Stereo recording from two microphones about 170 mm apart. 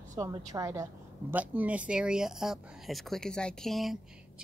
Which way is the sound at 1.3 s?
10° right (ahead or behind).